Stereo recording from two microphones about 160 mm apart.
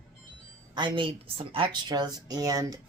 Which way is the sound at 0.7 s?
30° right (ahead or behind).